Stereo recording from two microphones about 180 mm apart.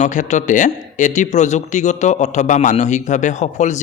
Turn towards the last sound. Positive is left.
turn(degrees=40)  # may be behind; listen again after turning